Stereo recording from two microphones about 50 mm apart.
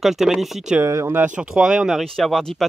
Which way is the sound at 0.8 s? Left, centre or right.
Right.